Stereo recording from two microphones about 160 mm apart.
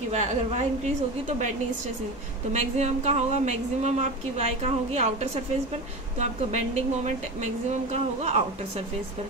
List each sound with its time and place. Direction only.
0.1 s speech: 45° right (ahead or behind)
2.5 s speech: 45° right (ahead or behind)
7.9 s speech: 40° right (ahead or behind)